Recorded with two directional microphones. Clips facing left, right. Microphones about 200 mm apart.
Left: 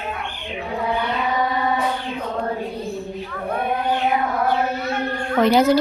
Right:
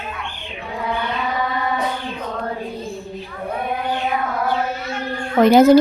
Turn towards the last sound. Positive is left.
turn(degrees=-45)  # may be behind; listen again after turning